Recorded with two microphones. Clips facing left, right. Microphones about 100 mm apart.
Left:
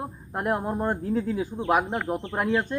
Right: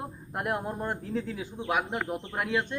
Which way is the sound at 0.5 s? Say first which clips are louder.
Left 5 dB; 40° left (ahead or behind).